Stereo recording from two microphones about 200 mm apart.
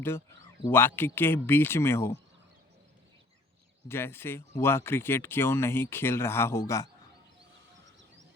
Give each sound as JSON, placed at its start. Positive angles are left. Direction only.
{"t": 0.6, "sound": "speech", "side_deg": 10}
{"t": 3.8, "sound": "speech", "side_deg": 10}